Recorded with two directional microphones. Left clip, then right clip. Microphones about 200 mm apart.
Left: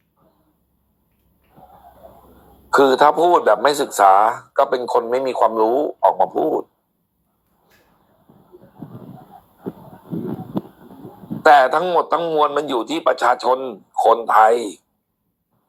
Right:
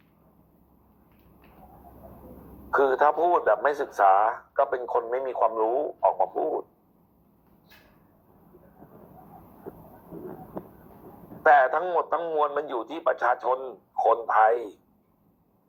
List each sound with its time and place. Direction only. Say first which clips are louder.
2.6 s a man's voice: left 8 dB; 50° left (ahead or behind)
11.4 s a man's voice: left 7 dB; 50° left (ahead or behind)